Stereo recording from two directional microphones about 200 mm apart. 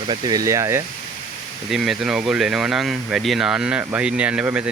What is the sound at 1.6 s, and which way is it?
Speech, centre (ahead or behind).